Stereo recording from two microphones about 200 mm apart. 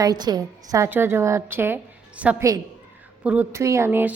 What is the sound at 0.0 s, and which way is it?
Speech, 20° right (ahead or behind).